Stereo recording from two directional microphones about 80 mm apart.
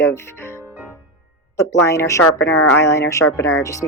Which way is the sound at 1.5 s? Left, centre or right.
Left.